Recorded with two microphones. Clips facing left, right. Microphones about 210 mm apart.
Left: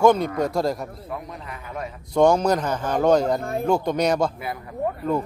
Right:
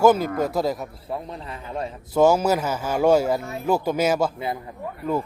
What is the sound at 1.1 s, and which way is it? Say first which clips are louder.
Speech: right 2 dB; 30° right (ahead or behind).